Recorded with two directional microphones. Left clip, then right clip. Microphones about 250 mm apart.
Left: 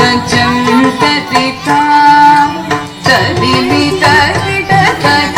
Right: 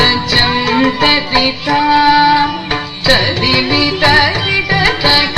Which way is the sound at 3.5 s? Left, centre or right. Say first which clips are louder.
Left 2 dB; left.